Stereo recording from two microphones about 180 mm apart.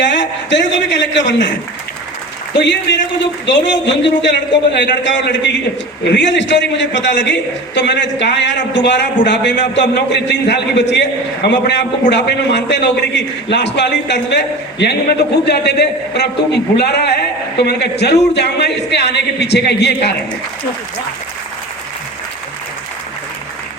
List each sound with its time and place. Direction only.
0.0 s a man's voice: 80° left
3.8 s a man's voice: 80° left